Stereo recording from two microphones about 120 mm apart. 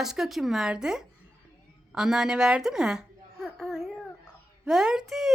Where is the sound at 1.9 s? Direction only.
5° right (ahead or behind).